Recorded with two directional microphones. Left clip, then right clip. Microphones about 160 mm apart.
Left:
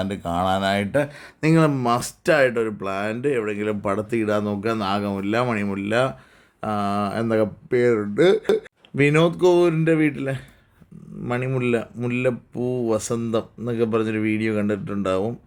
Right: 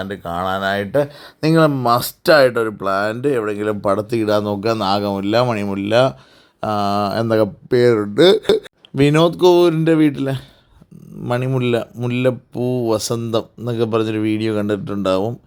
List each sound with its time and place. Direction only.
0.0 s speech: 5° left (ahead or behind); by 15.4 s 30° right (ahead or behind)